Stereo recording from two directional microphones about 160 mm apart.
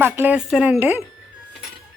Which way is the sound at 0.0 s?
10° right (ahead or behind).